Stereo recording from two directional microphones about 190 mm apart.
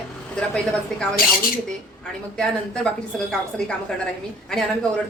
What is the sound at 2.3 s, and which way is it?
A woman's voice, 5° left (ahead or behind).